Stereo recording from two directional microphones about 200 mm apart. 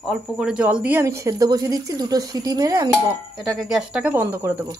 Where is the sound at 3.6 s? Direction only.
5° right (ahead or behind).